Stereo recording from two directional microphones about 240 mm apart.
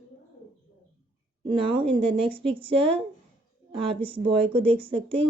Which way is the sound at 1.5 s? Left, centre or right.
Right.